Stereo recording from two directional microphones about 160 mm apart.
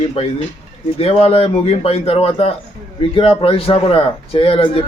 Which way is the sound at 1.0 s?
40° left (ahead or behind).